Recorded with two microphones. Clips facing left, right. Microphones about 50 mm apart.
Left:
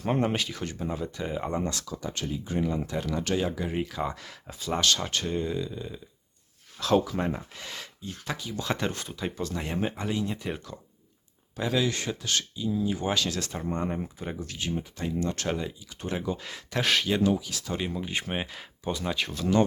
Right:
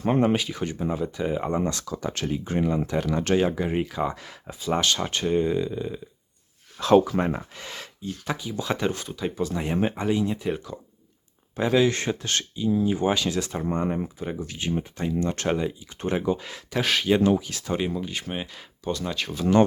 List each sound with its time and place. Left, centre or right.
0.2 s speech: centre
1.8 s speech: right
2.7 s speech: right
3.8 s speech: centre; by 7.4 s right
7.6 s speech: centre
9.4 s speech: centre
9.8 s speech: right
10.2 s speech: centre
11.5 s speech: right; by 14.6 s centre
14.6 s speech: right
16.4 s speech: centre
17.2 s speech: right
17.7 s speech: centre
18.3 s speech: centre